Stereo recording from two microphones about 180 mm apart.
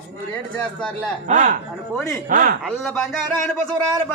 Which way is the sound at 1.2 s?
45° right (ahead or behind).